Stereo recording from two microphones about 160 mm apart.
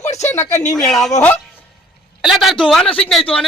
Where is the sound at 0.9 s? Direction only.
Centre (ahead or behind).